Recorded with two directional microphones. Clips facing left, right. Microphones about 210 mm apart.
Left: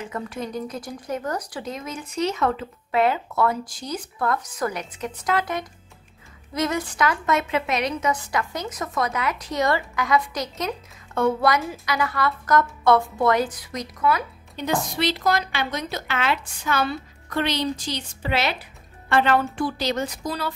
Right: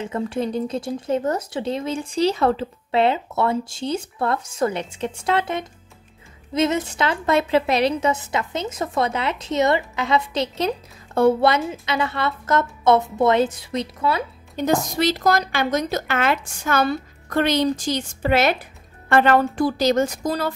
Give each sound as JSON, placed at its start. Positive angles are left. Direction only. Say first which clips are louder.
{"t": 0.0, "sound": "speech", "louder": "right 6 dB", "side_deg": -30}
{"t": 14.6, "sound": "a woman's voice", "louder": "right 4 dB", "side_deg": -45}